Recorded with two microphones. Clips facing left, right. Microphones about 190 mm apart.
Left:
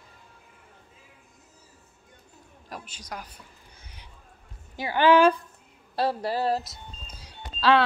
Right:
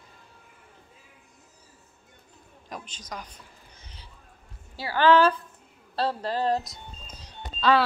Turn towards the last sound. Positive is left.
turn(degrees=5)  # may be behind; listen again after turning